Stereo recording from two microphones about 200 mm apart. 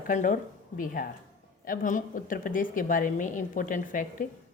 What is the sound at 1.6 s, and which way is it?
Speech, 45° left (ahead or behind).